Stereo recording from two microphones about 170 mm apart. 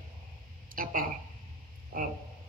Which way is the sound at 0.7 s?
55° right (ahead or behind).